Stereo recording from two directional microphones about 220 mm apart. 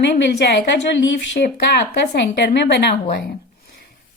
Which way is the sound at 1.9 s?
45° left (ahead or behind).